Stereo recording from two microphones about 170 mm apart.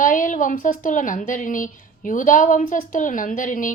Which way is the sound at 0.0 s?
50° left (ahead or behind).